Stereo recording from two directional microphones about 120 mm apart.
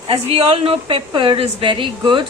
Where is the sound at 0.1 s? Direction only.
55° right (ahead or behind).